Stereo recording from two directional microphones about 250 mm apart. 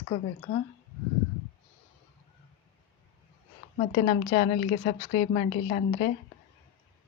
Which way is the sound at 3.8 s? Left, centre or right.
Left.